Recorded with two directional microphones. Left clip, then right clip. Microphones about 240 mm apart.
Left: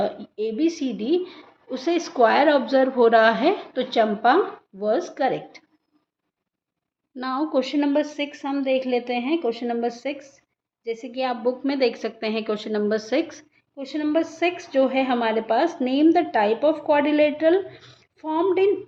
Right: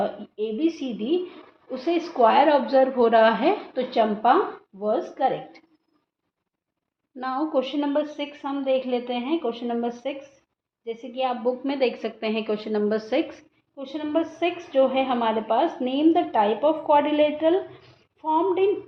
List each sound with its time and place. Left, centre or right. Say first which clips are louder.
0.0 s a woman's voice: left 2 dB; left
7.2 s a woman's voice: left 1 dB; centre